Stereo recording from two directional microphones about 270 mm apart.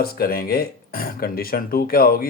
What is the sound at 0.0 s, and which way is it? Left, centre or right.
Speech, left.